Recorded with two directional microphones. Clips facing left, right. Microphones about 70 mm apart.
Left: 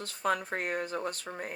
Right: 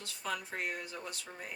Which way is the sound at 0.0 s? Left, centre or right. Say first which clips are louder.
Left 8 dB; left.